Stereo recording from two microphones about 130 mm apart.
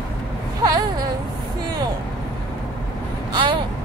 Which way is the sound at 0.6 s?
30° right (ahead or behind).